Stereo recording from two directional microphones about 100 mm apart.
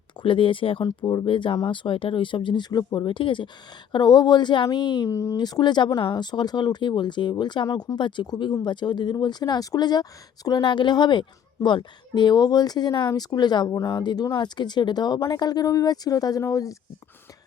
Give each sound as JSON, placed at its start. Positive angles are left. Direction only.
{"t": 0.2, "sound": "speech", "side_deg": 60}
{"t": 0.9, "sound": "speech", "side_deg": 50}
{"t": 3.9, "sound": "speech", "side_deg": 45}
{"t": 5.0, "sound": "speech", "side_deg": 30}
{"t": 5.4, "sound": "speech", "side_deg": 45}